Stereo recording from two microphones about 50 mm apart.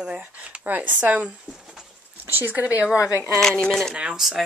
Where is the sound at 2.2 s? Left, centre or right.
Right.